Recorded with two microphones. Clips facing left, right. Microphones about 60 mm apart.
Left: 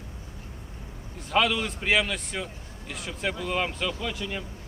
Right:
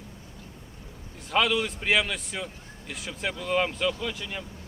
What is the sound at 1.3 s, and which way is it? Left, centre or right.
A man's voice, centre.